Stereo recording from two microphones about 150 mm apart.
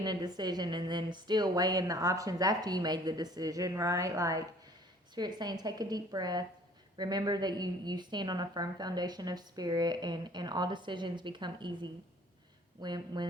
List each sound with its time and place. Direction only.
0.0 s a woman's voice: 30° right (ahead or behind)